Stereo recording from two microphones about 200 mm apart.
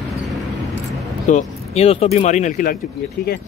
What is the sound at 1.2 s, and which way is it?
Speech, 35° left (ahead or behind).